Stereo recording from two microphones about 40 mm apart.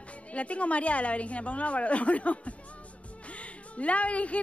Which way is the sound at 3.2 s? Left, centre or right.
Left.